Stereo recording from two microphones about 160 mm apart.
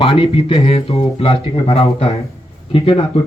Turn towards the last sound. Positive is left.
turn(degrees=35)  # may be behind; listen again after turning